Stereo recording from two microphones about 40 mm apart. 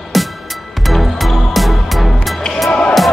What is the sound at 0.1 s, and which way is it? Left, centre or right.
Music, centre.